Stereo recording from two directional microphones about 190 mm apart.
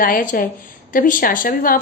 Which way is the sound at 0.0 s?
45° left (ahead or behind).